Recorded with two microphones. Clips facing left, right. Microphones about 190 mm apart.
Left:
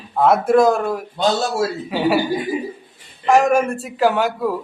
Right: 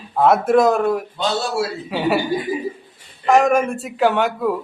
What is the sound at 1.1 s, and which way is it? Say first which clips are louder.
Speech: left 2 dB; 40° left (ahead or behind).